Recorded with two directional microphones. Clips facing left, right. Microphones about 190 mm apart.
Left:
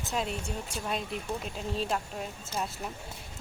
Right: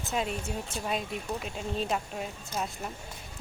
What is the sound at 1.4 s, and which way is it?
Speech, centre (ahead or behind).